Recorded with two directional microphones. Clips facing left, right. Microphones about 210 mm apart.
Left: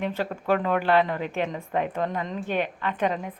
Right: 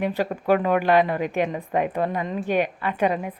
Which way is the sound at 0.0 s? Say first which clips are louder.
Right 4 dB; 15° right (ahead or behind).